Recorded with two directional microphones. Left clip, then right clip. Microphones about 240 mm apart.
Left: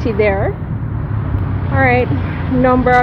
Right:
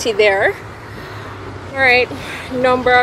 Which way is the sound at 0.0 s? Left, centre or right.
Right.